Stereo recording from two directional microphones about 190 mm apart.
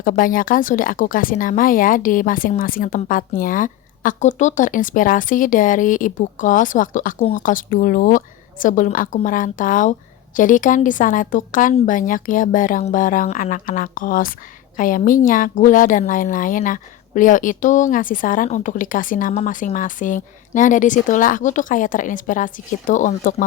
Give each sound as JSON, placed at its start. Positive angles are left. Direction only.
{"t": 0.0, "sound": "a woman's voice", "side_deg": 45}